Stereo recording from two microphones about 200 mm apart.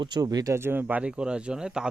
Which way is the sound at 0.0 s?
20° right (ahead or behind).